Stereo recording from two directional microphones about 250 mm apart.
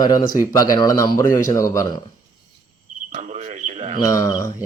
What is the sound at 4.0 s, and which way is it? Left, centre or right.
Speech, centre.